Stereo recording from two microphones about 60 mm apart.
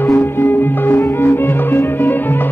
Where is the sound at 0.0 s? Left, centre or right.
Left.